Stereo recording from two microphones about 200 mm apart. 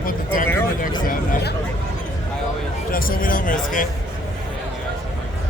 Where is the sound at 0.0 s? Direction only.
45° left (ahead or behind).